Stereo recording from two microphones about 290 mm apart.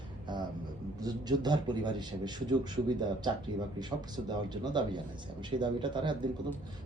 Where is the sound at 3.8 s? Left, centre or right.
Centre.